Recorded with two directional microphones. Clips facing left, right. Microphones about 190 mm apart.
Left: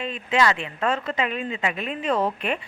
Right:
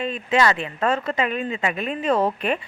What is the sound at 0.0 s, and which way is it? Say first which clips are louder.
A woman's voice: right 2 dB; 40° right (ahead or behind).